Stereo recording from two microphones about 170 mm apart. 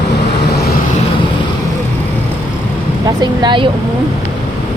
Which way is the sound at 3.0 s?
25° right (ahead or behind).